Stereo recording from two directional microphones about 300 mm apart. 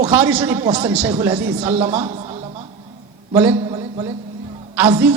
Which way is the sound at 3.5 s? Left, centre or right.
Centre.